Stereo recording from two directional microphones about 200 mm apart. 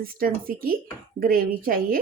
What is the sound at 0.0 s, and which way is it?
Speech, 45° right (ahead or behind).